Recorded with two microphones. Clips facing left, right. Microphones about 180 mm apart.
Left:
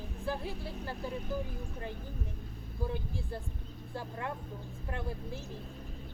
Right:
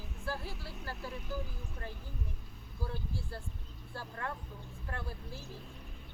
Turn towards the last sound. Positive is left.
turn(degrees=20)  # may be behind; listen again after turning